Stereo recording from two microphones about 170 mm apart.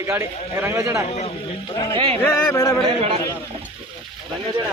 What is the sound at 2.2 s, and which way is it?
Speech, 15° left (ahead or behind).